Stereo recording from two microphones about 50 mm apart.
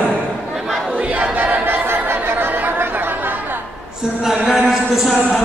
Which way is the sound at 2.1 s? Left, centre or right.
Right.